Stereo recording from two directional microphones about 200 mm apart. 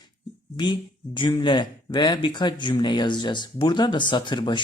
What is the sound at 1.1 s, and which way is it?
Speech, 25° left (ahead or behind).